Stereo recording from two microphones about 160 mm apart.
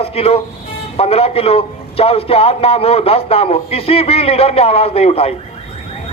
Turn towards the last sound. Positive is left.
turn(degrees=35)  # may be behind; listen again after turning